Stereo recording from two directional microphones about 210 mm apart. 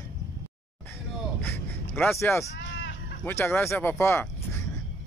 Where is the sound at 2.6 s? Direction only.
60° left (ahead or behind).